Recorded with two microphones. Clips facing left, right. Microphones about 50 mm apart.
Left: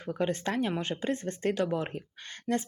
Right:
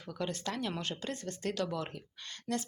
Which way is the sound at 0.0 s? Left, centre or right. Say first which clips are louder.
Left 7 dB; left.